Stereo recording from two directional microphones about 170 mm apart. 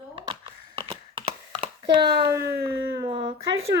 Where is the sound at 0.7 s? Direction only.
35° right (ahead or behind).